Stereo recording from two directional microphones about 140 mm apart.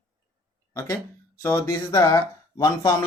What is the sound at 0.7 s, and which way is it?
Speech, 20° left (ahead or behind).